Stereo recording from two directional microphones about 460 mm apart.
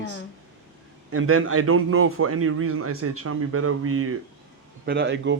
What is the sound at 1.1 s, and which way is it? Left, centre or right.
A man's voice, right.